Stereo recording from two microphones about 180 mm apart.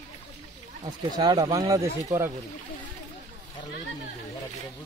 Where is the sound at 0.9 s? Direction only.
25° right (ahead or behind).